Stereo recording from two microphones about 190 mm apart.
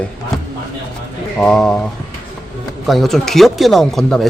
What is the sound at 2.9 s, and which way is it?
Speech, centre (ahead or behind).